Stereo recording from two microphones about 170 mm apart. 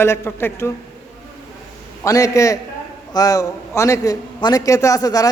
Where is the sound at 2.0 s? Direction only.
20° left (ahead or behind).